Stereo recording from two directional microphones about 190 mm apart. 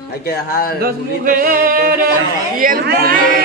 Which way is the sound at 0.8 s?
50° right (ahead or behind).